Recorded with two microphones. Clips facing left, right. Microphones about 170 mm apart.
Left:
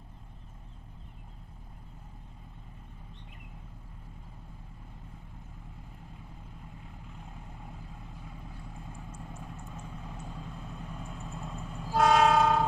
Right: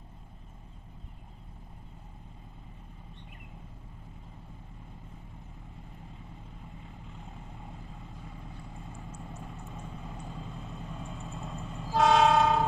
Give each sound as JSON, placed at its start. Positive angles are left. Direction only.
{"t": 7.2, "sound": "vehicle", "side_deg": 0}